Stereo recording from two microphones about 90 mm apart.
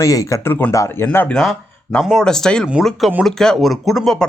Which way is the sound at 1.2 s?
5° left (ahead or behind).